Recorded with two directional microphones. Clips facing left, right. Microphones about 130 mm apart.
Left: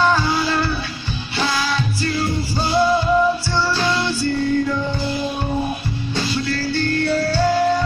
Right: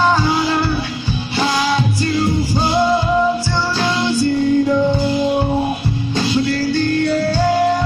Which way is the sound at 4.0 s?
15° right (ahead or behind).